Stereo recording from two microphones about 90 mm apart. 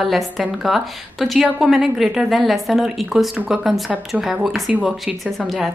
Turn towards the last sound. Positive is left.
turn(degrees=0)  # may be behind; listen again after turning